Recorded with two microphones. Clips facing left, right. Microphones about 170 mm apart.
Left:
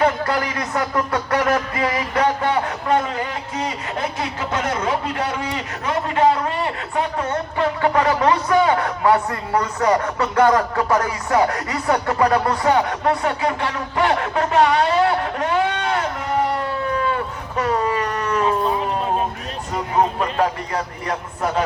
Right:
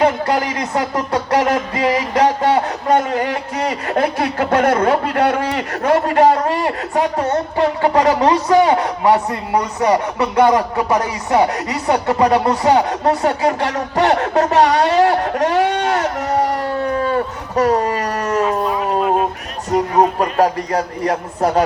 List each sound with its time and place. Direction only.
0.0 s speech: 25° right (ahead or behind)
1.8 s music: 35° right (ahead or behind)
3.2 s speech: 65° right (ahead or behind)
6.1 s speech: 40° right (ahead or behind)
15.5 s sheep: 40° right (ahead or behind)
16.6 s a sound: 40° right (ahead or behind)
19.7 s a man's voice: 40° right (ahead or behind)